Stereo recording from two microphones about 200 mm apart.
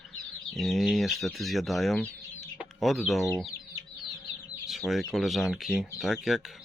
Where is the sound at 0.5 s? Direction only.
Centre (ahead or behind).